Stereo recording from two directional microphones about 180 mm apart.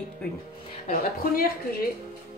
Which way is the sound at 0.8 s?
55° left (ahead or behind).